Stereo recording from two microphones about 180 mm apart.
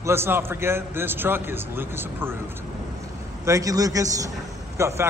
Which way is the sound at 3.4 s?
20° right (ahead or behind).